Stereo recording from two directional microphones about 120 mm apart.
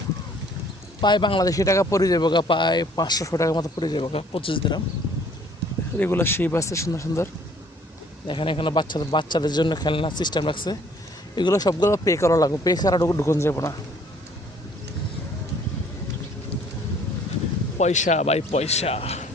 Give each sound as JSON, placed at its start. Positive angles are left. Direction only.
{"t": 1.0, "sound": "speech", "side_deg": 40}
{"t": 6.0, "sound": "speech", "side_deg": 20}
{"t": 8.3, "sound": "speech", "side_deg": 45}
{"t": 17.7, "sound": "a man's voice", "side_deg": 80}